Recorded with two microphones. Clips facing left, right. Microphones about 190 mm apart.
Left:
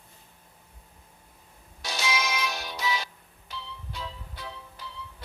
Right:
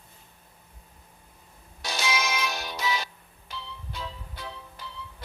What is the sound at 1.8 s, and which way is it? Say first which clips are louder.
Music: right 1 dB; 55° right (ahead or behind).